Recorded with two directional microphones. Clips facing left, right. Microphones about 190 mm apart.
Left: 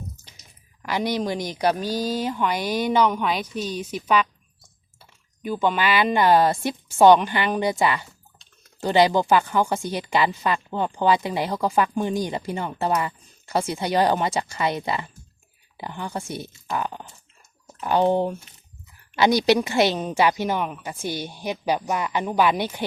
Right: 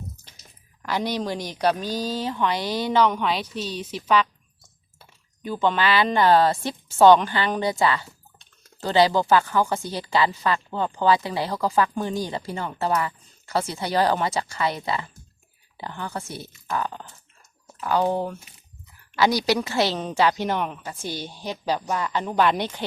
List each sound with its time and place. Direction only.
0.8 s speech: 10° left (ahead or behind)
5.4 s speech: 10° left (ahead or behind)